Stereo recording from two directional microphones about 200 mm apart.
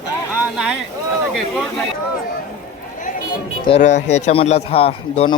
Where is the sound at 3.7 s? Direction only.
25° left (ahead or behind).